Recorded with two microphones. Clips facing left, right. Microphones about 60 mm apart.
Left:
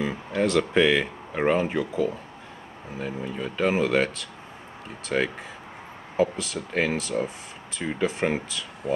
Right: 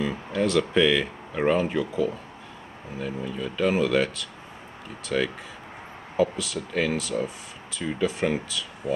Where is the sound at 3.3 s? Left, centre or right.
Left.